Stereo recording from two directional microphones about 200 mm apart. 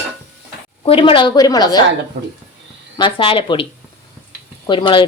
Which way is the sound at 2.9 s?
25° left (ahead or behind).